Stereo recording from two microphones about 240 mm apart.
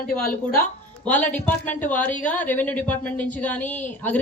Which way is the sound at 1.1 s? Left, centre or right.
Centre.